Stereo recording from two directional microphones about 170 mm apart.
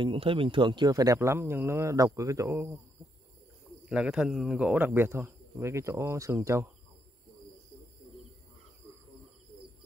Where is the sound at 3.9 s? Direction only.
5° right (ahead or behind).